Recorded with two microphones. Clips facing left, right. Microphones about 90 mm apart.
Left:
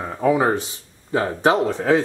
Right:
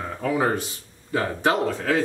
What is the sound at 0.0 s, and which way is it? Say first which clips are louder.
Speech: left 5 dB; 20° left (ahead or behind).